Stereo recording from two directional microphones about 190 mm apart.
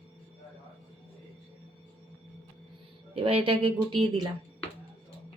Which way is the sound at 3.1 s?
30° right (ahead or behind).